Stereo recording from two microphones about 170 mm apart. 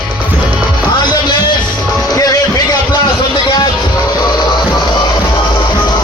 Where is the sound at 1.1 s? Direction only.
25° left (ahead or behind).